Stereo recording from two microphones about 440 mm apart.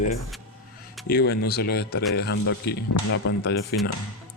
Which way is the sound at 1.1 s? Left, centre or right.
Left.